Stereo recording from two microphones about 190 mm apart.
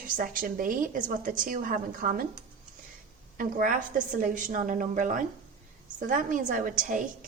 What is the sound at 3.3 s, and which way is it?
A woman's voice, 45° right (ahead or behind).